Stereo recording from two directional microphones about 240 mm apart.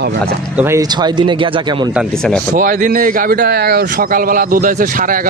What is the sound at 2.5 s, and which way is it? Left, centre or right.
Speech, right.